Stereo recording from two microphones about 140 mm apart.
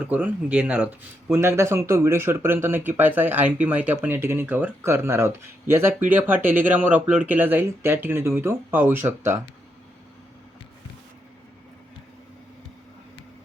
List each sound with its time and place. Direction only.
0.0 s speech: 15° right (ahead or behind)